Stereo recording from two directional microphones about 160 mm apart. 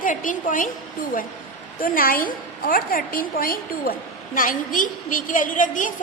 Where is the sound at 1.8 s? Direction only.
65° left (ahead or behind).